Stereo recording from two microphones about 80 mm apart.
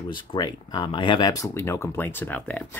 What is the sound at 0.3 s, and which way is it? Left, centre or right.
Speech, left.